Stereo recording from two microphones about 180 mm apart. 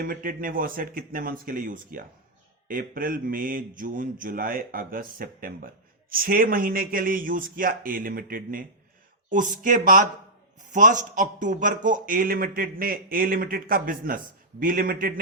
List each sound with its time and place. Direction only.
0.0 s a man's voice: 50° right (ahead or behind)